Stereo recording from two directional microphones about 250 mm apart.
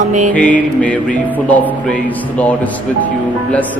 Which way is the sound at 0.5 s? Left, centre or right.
Centre.